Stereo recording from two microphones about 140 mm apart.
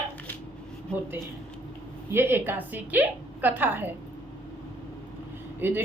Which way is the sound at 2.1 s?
15° right (ahead or behind).